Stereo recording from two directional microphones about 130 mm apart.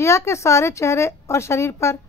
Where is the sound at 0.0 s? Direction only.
20° left (ahead or behind).